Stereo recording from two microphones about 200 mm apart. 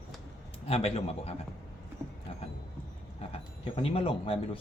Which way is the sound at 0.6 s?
30° left (ahead or behind).